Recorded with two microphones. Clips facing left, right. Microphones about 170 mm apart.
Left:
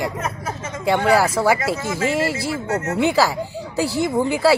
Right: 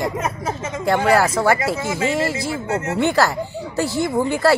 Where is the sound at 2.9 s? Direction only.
5° left (ahead or behind).